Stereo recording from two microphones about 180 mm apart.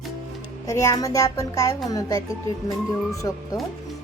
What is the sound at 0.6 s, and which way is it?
Speech, 15° left (ahead or behind).